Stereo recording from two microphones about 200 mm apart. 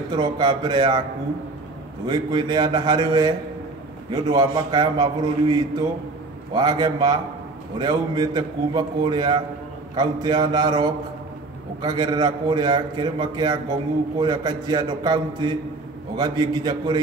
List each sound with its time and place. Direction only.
0.1 s a man's voice: 20° right (ahead or behind)
2.0 s a man's voice: 20° right (ahead or behind)